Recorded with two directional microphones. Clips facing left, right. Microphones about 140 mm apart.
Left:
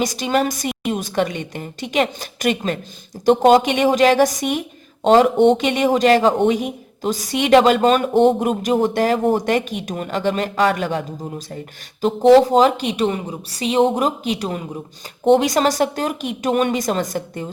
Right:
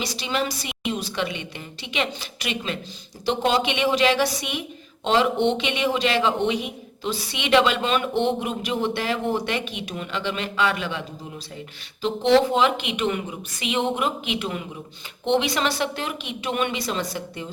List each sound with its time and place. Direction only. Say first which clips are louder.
0.0 s a man's voice: left 7 dB; 45° left (ahead or behind)